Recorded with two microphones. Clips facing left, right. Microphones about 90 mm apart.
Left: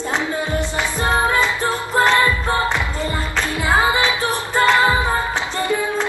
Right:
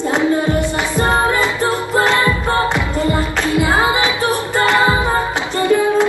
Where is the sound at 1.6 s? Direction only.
15° right (ahead or behind).